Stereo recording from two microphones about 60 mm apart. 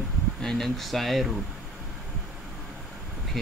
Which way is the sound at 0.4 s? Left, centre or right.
Centre.